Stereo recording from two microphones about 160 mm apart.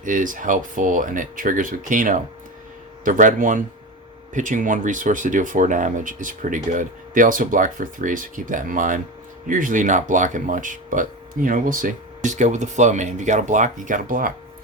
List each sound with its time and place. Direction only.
0.0 s speech: 55° right (ahead or behind)